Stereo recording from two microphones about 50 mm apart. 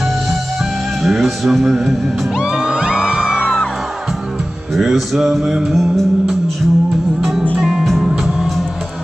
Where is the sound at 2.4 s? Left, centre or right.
Centre.